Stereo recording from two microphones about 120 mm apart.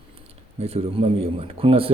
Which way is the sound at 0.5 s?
55° right (ahead or behind).